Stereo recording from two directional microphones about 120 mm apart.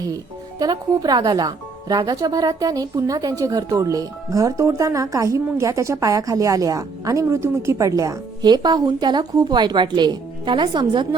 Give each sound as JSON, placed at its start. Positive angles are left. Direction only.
{"t": 0.6, "sound": "speech", "side_deg": -35}